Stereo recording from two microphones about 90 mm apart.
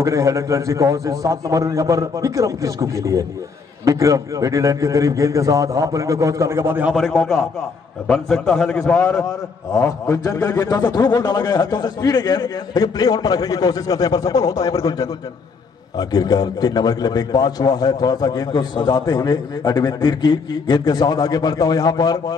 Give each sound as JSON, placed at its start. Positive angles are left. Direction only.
{"t": 0.0, "sound": "a man's voice", "side_deg": -35}
{"t": 7.0, "sound": "a man's voice", "side_deg": 0}
{"t": 10.2, "sound": "a man's voice", "side_deg": 40}